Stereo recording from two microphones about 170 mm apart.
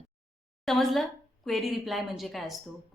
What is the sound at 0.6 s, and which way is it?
A woman's voice, centre (ahead or behind).